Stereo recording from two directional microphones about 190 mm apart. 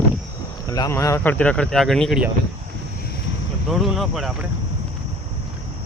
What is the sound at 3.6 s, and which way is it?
Speech, centre (ahead or behind).